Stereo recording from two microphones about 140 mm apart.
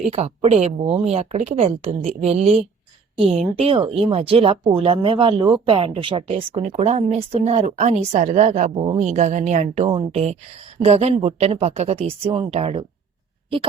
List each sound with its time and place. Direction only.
0.1 s speech: 50° right (ahead or behind)
3.7 s speech: 40° right (ahead or behind)